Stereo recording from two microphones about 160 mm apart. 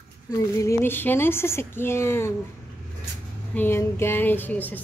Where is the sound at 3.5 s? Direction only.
15° left (ahead or behind).